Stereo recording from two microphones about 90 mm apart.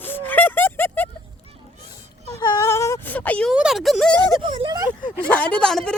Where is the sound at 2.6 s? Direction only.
35° left (ahead or behind).